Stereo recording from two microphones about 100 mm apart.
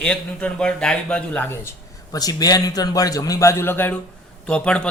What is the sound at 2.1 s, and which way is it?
A man's voice, 40° left (ahead or behind).